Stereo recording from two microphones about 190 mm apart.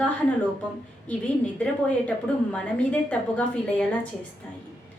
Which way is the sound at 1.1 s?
5° left (ahead or behind).